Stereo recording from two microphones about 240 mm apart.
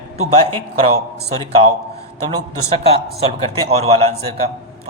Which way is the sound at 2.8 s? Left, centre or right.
Right.